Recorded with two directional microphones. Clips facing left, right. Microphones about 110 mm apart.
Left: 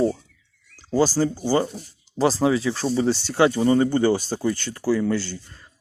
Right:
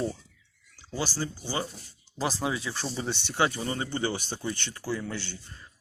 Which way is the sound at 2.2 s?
35° left (ahead or behind).